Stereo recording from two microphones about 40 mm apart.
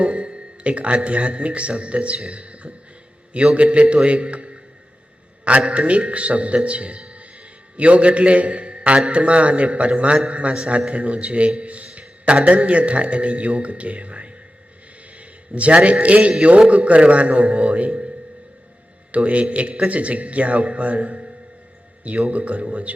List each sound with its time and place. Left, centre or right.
0.0 s speech: right
2.3 s music: right
3.3 s a man's voice: right
19.1 s speech: right
22.3 s speech: right